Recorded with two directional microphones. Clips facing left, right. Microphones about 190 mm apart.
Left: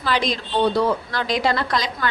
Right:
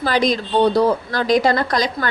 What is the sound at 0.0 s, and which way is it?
A woman's voice, 45° right (ahead or behind).